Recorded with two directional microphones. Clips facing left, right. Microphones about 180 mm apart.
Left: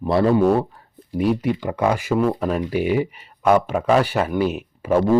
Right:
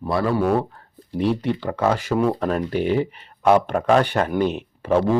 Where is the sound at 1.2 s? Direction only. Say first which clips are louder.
Left 1 dB; 10° left (ahead or behind).